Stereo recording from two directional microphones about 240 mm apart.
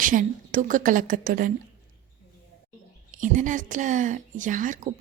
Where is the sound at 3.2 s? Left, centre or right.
Right.